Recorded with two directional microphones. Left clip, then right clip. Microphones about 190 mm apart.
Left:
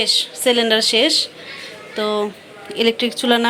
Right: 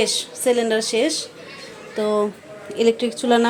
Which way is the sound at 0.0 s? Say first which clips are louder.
Left 4 dB; 5° right (ahead or behind).